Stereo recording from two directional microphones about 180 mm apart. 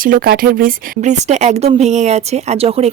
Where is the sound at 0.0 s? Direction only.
50° right (ahead or behind).